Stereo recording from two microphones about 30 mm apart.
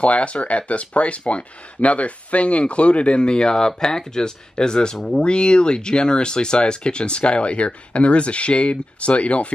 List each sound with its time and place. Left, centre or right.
0.0 s speech: left